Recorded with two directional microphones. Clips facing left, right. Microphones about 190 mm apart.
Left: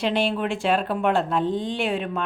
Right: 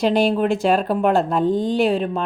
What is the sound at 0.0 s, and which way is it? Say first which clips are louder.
Speech: right 6 dB; 40° right (ahead or behind).